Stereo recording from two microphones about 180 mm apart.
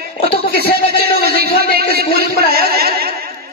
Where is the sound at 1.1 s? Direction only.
60° right (ahead or behind).